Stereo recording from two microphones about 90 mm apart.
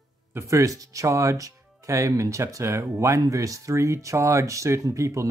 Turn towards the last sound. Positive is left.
turn(degrees=-35)  # may be behind; listen again after turning